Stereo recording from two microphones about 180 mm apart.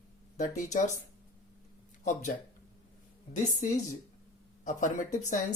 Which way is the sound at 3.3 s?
40° left (ahead or behind).